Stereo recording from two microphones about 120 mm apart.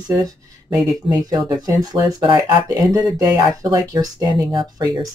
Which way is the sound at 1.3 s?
35° right (ahead or behind).